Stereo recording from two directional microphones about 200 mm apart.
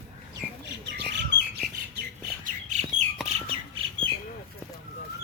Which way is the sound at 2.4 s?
35° right (ahead or behind).